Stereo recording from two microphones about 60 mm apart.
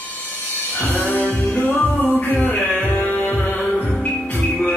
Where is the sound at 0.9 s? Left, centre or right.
Left.